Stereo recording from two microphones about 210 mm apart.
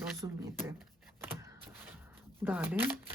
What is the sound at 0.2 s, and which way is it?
Speech, 20° right (ahead or behind).